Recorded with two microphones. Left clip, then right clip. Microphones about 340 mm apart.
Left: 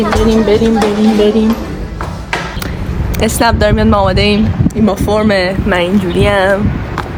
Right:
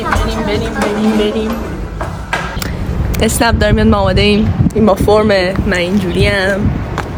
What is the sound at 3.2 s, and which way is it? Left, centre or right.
Speech, centre.